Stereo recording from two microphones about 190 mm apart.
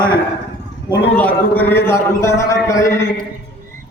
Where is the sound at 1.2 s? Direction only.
10° left (ahead or behind).